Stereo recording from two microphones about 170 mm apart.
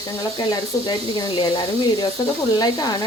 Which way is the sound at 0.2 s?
25° left (ahead or behind).